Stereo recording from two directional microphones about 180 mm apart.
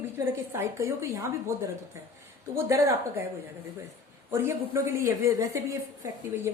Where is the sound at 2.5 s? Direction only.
15° right (ahead or behind).